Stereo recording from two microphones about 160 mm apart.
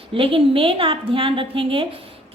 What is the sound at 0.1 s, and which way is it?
A woman's voice, 35° right (ahead or behind).